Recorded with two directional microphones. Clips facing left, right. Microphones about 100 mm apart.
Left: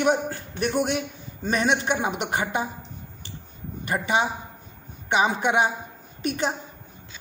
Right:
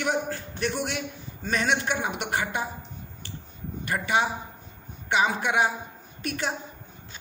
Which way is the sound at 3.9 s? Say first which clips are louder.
Left 2 dB; 20° left (ahead or behind).